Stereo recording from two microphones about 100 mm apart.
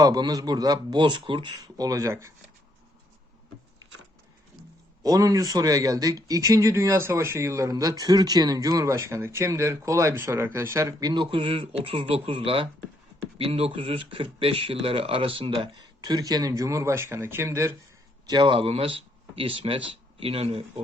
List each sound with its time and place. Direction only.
0.0 s speech: 35° right (ahead or behind); by 1.5 s 55° right (ahead or behind)
1.5 s speech: 35° right (ahead or behind)
5.0 s speech: 35° right (ahead or behind)
11.1 s speech: 55° right (ahead or behind); by 17.7 s 25° right (ahead or behind)
18.3 s speech: 50° right (ahead or behind); by 20.8 s 70° right (ahead or behind)